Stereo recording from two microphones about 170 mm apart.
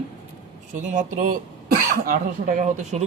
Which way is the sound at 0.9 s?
50° right (ahead or behind).